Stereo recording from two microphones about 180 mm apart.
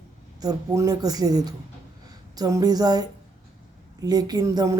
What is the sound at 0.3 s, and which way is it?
A woman's voice, 20° right (ahead or behind).